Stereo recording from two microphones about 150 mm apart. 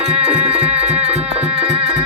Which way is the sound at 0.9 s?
10° right (ahead or behind).